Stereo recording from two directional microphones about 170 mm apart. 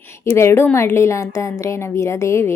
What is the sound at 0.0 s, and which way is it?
A woman's voice, 15° left (ahead or behind).